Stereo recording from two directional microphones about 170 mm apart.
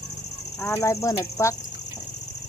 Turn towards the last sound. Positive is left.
turn(degrees=20)  # may be behind; listen again after turning